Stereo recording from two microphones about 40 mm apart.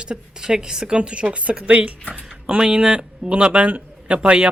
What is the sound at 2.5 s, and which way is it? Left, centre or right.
A woman's voice, right.